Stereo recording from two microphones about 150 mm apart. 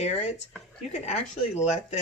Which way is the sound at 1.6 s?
50° left (ahead or behind).